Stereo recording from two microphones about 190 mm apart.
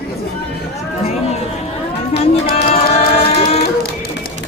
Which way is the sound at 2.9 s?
30° left (ahead or behind).